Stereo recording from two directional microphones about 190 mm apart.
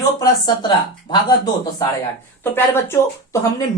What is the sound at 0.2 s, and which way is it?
Speech, 20° left (ahead or behind).